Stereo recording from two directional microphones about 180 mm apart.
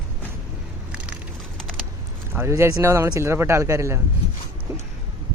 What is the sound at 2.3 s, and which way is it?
Speech, 15° right (ahead or behind).